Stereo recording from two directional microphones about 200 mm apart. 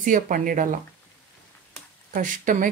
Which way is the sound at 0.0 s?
40° right (ahead or behind).